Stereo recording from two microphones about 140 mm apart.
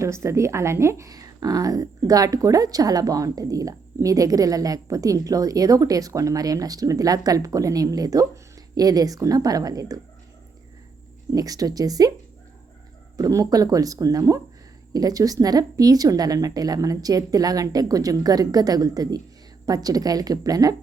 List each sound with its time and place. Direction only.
0.0 s speech: 20° right (ahead or behind)
11.3 s speech: 25° right (ahead or behind)
13.1 s speech: 25° right (ahead or behind)